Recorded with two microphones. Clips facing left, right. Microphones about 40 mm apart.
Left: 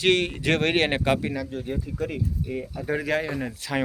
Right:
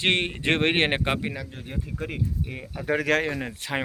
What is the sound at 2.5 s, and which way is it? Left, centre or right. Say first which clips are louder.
Speech: even; right.